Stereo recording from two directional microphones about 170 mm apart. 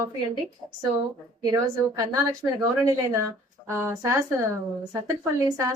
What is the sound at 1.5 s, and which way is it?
A woman's voice, 20° right (ahead or behind).